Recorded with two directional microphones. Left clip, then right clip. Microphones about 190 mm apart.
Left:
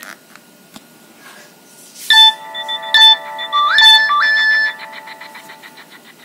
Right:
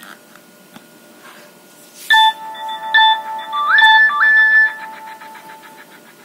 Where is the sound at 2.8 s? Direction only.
40° left (ahead or behind).